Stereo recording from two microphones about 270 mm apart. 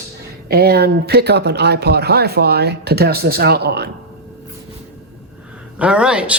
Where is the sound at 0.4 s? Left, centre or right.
Right.